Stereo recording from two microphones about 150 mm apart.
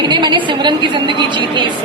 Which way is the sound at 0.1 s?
30° right (ahead or behind).